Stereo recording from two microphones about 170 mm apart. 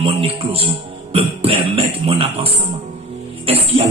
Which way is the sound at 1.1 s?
35° right (ahead or behind).